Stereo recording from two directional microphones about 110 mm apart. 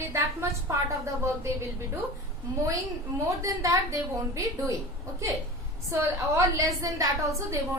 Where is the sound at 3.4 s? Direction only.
30° right (ahead or behind).